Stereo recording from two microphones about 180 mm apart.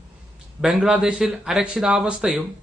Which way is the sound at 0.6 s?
5° right (ahead or behind).